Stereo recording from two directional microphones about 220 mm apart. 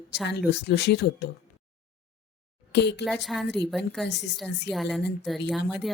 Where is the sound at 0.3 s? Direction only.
45° left (ahead or behind).